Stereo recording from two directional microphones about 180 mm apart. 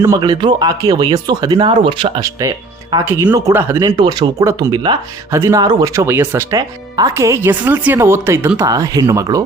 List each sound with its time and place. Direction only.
0.2 s speech: 25° right (ahead or behind)
3.0 s speech: 10° right (ahead or behind)